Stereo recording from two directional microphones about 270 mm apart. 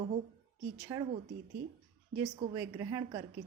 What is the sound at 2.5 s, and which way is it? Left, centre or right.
Speech, centre.